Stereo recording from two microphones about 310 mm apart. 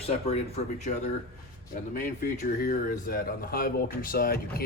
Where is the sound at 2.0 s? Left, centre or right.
Left.